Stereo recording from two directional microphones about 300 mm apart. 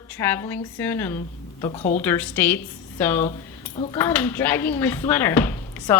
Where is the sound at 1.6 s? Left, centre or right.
Centre.